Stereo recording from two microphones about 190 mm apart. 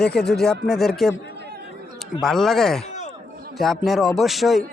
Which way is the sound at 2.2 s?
Centre (ahead or behind).